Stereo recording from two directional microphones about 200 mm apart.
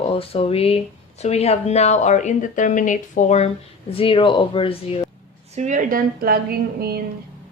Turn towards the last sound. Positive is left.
turn(degrees=-50)  # may be behind; listen again after turning